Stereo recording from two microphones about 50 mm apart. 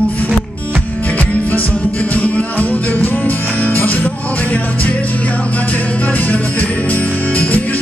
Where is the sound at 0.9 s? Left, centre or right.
Left.